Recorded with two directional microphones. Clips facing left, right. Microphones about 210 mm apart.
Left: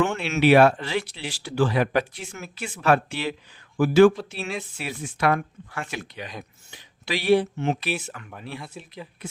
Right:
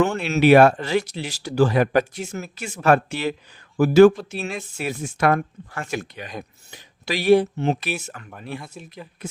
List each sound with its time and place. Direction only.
0.2 s speech: 40° right (ahead or behind)